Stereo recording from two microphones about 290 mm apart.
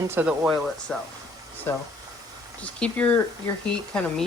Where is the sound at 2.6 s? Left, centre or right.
Centre.